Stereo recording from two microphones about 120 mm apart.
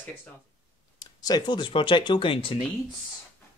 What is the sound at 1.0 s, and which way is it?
Speech, 35° left (ahead or behind).